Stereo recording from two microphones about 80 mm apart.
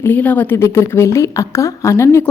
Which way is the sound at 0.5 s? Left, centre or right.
Left.